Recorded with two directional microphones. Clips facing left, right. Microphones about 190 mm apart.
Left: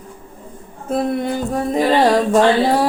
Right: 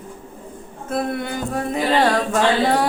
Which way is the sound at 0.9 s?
35° left (ahead or behind).